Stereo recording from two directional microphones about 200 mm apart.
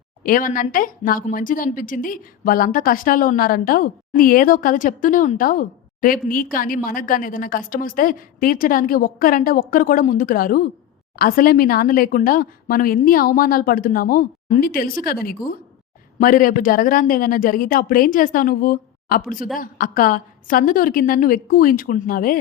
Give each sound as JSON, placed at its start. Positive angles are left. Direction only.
{"t": 0.2, "sound": "speech", "side_deg": 45}